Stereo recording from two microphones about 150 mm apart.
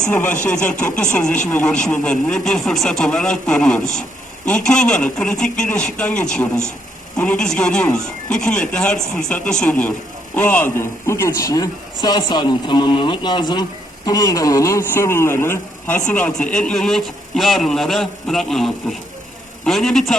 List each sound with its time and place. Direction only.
0.1 s a man's voice: 10° left (ahead or behind)